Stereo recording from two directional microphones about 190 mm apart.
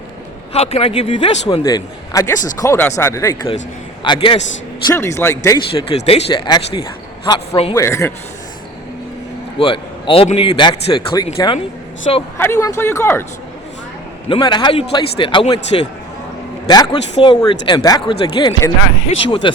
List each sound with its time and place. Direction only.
0.5 s a man's voice: 35° left (ahead or behind); by 5.5 s 15° left (ahead or behind)
5.7 s a man's voice: 30° left (ahead or behind)
7.8 s speech: 15° left (ahead or behind)
9.6 s a man's voice: 30° left (ahead or behind)
11.3 s speech: 35° left (ahead or behind)
12.4 s speech: 15° left (ahead or behind)
14.3 s a man's voice: 25° left (ahead or behind)
16.6 s a man's voice: 20° left (ahead or behind)